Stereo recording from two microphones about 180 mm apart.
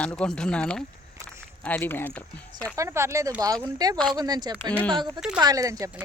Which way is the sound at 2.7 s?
15° right (ahead or behind).